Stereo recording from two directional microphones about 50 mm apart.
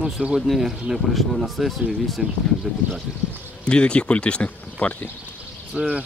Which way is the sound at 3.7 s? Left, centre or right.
Left.